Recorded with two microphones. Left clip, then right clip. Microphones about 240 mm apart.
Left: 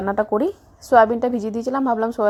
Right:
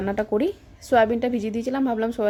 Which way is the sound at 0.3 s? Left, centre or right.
Centre.